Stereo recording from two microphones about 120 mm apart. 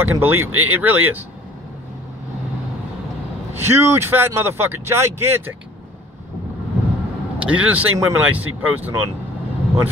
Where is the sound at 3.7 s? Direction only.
20° right (ahead or behind).